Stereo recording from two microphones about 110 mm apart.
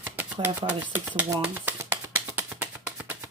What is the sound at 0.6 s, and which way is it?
Speech, 45° right (ahead or behind).